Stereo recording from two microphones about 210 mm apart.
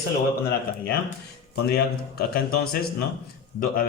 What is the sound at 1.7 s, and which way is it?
Speech, 50° left (ahead or behind).